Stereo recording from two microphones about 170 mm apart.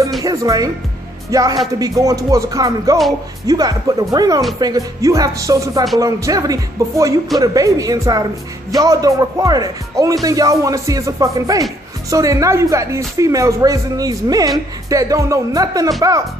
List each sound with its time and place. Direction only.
0.2 s speech: 20° right (ahead or behind)